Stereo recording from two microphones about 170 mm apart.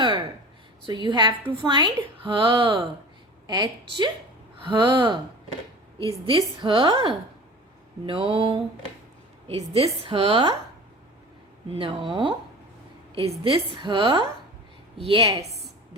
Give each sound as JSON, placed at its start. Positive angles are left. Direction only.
{"t": 0.9, "sound": "a woman's voice", "side_deg": -25}
{"t": 11.7, "sound": "a woman's voice", "side_deg": -30}